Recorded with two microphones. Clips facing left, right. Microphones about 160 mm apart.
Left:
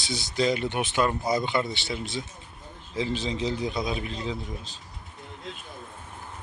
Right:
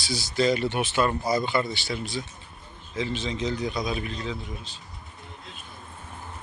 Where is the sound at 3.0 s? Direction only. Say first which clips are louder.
Left 1 dB; 35° left (ahead or behind).